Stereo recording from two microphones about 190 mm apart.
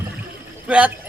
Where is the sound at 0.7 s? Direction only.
5° right (ahead or behind).